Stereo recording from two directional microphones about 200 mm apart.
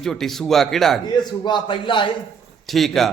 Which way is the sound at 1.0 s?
20° left (ahead or behind).